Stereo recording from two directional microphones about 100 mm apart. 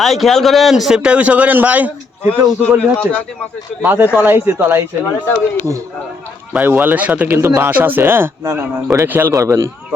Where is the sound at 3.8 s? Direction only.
20° right (ahead or behind).